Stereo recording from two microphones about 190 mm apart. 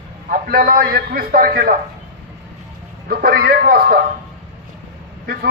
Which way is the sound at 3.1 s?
55° right (ahead or behind).